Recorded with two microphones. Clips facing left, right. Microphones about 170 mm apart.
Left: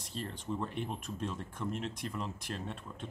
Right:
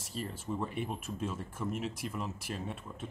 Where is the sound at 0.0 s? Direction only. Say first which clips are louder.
Right 1 dB; 5° right (ahead or behind).